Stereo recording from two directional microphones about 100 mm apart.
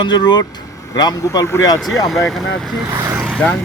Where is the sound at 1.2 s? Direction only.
35° left (ahead or behind).